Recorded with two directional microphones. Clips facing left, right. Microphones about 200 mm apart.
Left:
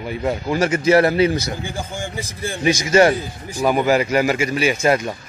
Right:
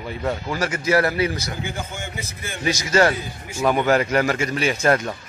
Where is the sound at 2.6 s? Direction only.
20° left (ahead or behind).